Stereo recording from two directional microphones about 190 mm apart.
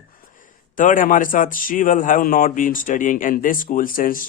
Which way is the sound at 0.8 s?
45° left (ahead or behind).